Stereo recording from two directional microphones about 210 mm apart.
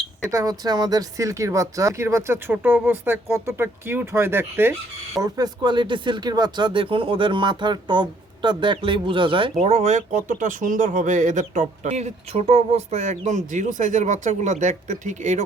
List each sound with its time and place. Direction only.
0.3 s speech: 15° right (ahead or behind); by 15.4 s 35° right (ahead or behind)